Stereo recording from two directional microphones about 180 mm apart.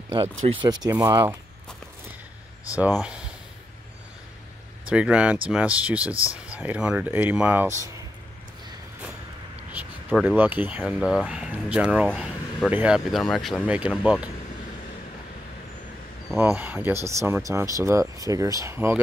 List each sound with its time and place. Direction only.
0.6 s speech: 20° right (ahead or behind)
2.8 s speech: 5° right (ahead or behind)
4.8 s speech: 5° right (ahead or behind)
9.7 s a sound: 10° right (ahead or behind)
10.2 s speech: 10° right (ahead or behind)
16.5 s speech: 10° right (ahead or behind)